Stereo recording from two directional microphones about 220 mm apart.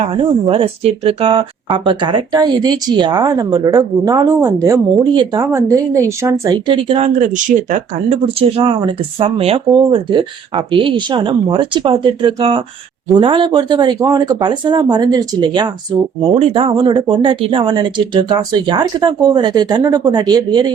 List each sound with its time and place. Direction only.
0.0 s speech: 20° right (ahead or behind)